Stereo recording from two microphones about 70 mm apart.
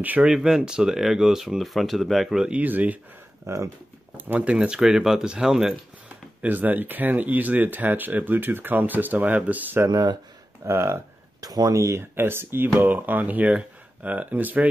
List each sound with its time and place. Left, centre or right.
0.2 s speech: centre
2.5 s speech: right
3.4 s speech: right
4.2 s speech: right
4.6 s speech: centre
6.4 s speech: right
9.8 s speech: right
10.6 s speech: right
11.4 s speech: right